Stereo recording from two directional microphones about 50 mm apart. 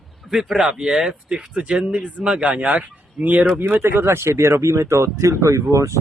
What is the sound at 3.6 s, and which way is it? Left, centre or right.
Speech, right.